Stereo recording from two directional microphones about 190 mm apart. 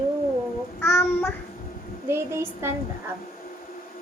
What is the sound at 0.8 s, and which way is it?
Child singing, 10° left (ahead or behind).